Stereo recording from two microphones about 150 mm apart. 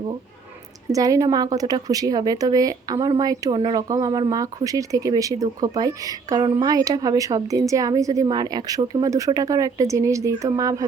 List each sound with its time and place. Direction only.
0.9 s speech: 25° right (ahead or behind)